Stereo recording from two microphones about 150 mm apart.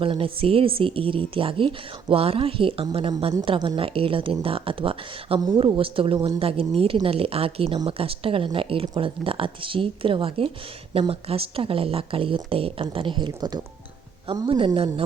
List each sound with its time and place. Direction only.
0.0 s speech: 35° right (ahead or behind)